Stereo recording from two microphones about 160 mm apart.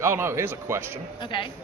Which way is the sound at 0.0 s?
15° right (ahead or behind).